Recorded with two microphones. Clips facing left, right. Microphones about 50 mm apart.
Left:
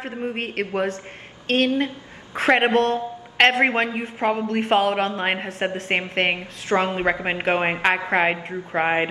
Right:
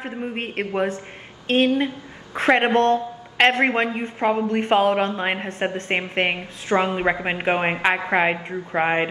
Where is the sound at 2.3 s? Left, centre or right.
Centre.